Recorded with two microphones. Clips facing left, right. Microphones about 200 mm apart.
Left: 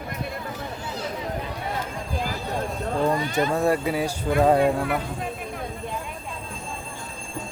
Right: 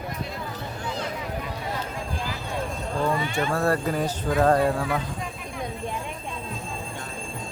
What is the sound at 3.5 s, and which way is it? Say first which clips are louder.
Speech: even; 15° left (ahead or behind).